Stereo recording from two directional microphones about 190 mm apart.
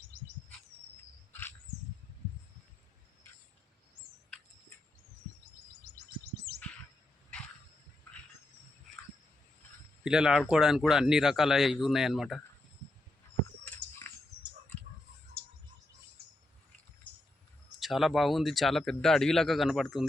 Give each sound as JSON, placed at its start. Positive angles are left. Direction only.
{"t": 1.3, "sound": "a sound", "side_deg": 10}
{"t": 6.5, "sound": "bird", "side_deg": -55}
{"t": 10.0, "sound": "speech", "side_deg": -5}
{"t": 14.0, "sound": "bird", "side_deg": 10}
{"t": 17.7, "sound": "speech", "side_deg": 0}